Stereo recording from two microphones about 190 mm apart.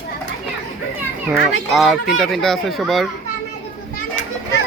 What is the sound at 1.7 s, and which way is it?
Speech, centre (ahead or behind).